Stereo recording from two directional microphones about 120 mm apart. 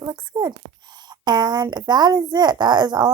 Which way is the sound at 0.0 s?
35° right (ahead or behind).